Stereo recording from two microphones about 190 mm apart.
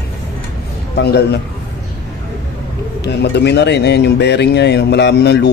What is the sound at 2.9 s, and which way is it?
Speech, 65° left (ahead or behind).